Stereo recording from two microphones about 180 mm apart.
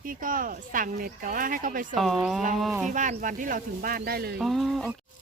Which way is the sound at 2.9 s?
45° right (ahead or behind).